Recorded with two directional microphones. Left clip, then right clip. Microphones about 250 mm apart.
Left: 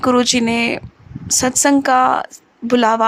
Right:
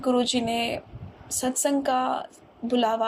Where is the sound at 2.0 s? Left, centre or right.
Left.